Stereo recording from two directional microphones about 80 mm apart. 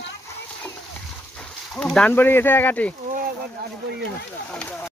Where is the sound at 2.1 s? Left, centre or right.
Left.